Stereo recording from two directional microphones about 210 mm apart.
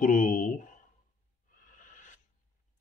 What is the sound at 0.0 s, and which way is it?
Speech, 40° left (ahead or behind).